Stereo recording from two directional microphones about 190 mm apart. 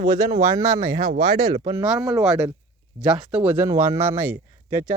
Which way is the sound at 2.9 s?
35° right (ahead or behind).